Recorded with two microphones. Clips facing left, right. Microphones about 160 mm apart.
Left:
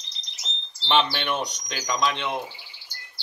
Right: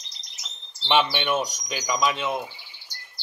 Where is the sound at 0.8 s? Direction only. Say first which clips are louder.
Right 1 dB; 5° right (ahead or behind).